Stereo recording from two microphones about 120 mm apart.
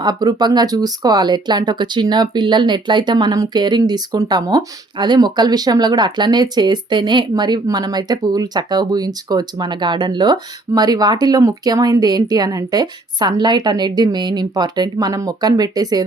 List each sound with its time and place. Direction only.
0.0 s speech: 35° right (ahead or behind)